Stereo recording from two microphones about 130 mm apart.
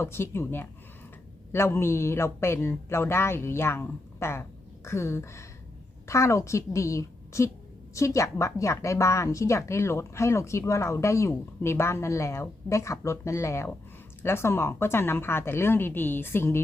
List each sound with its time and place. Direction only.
0.0 s speech: 20° left (ahead or behind)